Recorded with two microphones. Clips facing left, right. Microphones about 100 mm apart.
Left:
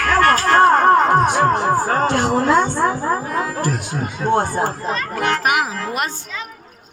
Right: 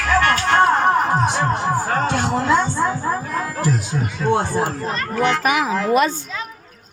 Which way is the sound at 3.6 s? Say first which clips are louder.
Right 1 dB; 55° left (ahead or behind).